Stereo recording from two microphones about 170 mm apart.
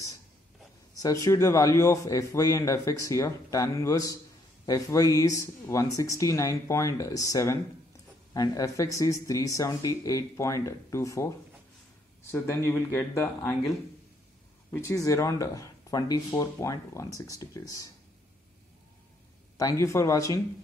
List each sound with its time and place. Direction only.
0.9 s a man's voice: 20° left (ahead or behind)
19.8 s speech: 15° left (ahead or behind)